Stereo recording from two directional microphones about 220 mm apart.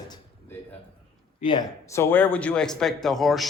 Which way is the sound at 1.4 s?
20° left (ahead or behind).